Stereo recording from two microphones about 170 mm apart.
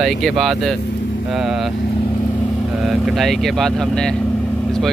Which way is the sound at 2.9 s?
Centre (ahead or behind).